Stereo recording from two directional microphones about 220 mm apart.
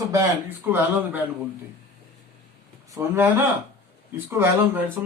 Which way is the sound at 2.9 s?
10° right (ahead or behind).